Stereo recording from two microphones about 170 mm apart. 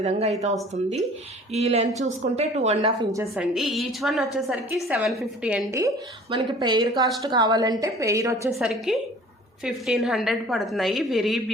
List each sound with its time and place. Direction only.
0.0 s speech: 40° right (ahead or behind)
1.5 s speech: 40° right (ahead or behind)
3.0 s a woman's voice: 20° right (ahead or behind)
3.3 s a woman's voice: centre (ahead or behind)
6.3 s a woman's voice: 25° right (ahead or behind)
8.5 s a woman's voice: centre (ahead or behind)